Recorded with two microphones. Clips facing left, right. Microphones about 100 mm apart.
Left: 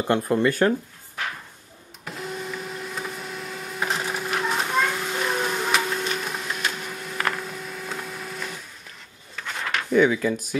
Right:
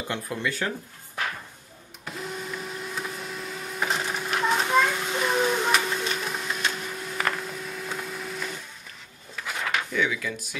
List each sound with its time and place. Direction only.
0.1 s speech: 50° left (ahead or behind)
2.0 s printer: centre (ahead or behind)
9.3 s a sound: 5° right (ahead or behind)
9.9 s speech: 40° left (ahead or behind)